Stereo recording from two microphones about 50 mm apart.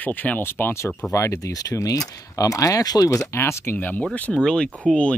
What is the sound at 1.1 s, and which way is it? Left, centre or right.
Speech, left.